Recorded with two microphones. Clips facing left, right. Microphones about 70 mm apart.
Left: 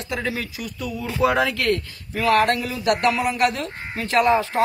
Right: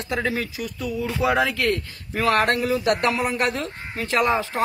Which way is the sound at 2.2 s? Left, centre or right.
Right.